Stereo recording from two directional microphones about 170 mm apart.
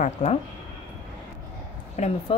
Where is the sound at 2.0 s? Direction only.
40° left (ahead or behind).